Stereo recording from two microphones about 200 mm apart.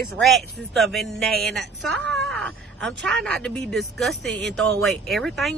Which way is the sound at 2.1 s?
Centre (ahead or behind).